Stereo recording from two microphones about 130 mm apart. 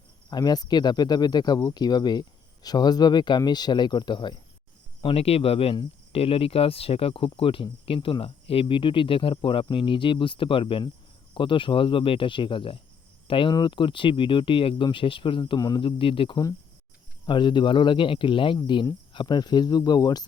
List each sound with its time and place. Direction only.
0.3 s speech: 30° left (ahead or behind)
4.9 s speech: 45° left (ahead or behind); by 20.2 s 30° left (ahead or behind)